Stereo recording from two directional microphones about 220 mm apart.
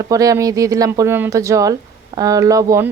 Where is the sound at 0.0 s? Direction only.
15° right (ahead or behind).